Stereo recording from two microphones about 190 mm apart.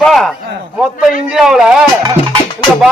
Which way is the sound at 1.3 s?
Centre (ahead or behind).